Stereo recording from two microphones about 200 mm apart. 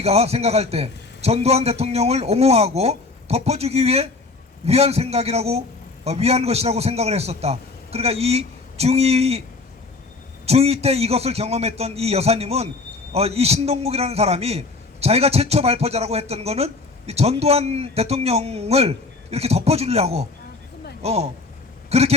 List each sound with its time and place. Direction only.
0.0 s a man's voice: 30° right (ahead or behind)
10.4 s a man's voice: 30° right (ahead or behind)